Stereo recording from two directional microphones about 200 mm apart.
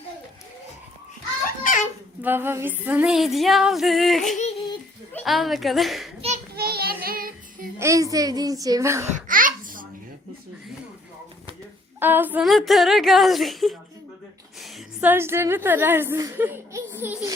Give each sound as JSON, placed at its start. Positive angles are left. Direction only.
{"t": 1.7, "sound": "a sound", "side_deg": 40}
{"t": 2.2, "sound": "a child's voice", "side_deg": -10}
{"t": 6.6, "sound": "child singing", "side_deg": -50}
{"t": 7.8, "sound": "a child's voice", "side_deg": -15}
{"t": 9.1, "sound": "a sound", "side_deg": -40}
{"t": 11.9, "sound": "a woman's voice", "side_deg": -10}
{"t": 14.6, "sound": "a woman's voice", "side_deg": -10}